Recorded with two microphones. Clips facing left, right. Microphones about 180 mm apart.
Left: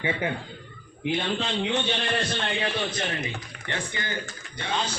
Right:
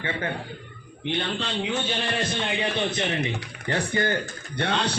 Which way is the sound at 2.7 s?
20° right (ahead or behind).